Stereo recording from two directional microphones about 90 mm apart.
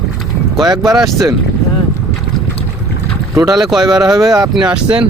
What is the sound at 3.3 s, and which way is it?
Speech, 35° right (ahead or behind).